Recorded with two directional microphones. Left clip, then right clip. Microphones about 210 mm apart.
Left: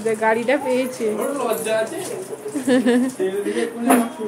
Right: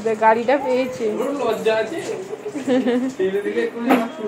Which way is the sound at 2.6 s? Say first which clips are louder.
Left 2 dB; 25° left (ahead or behind).